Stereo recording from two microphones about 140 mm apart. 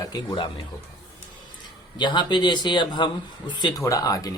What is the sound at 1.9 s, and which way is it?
A man's voice, 30° left (ahead or behind).